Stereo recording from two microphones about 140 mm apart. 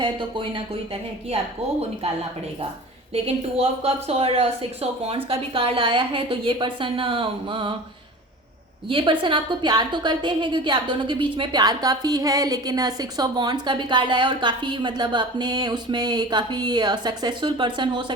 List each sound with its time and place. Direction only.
0.0 s a woman's voice: 35° right (ahead or behind)
3.1 s a woman's voice: 45° right (ahead or behind)
8.9 s a woman's voice: 40° right (ahead or behind)